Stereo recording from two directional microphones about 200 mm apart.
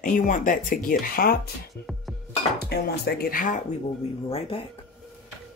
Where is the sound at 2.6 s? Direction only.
50° left (ahead or behind).